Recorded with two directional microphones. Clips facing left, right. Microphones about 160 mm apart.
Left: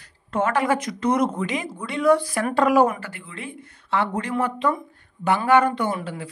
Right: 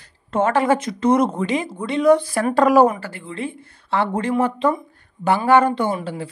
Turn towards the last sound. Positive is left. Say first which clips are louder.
# right 3 dB
turn(degrees=-30)  # may be behind; listen again after turning